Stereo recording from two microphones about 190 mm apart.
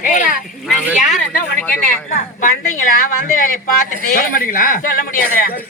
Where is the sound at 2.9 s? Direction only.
45° left (ahead or behind).